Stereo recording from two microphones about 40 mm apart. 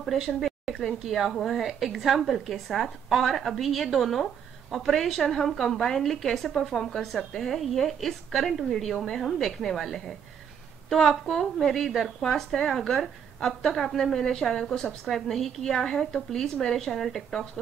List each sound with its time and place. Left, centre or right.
0.0 s a woman's voice: centre
1.6 s a woman's voice: centre
12.4 s a woman's voice: centre